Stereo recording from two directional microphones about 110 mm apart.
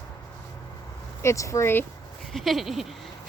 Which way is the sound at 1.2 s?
25° left (ahead or behind).